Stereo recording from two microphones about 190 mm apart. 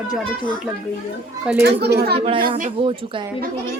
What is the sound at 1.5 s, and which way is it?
Speech, 5° right (ahead or behind).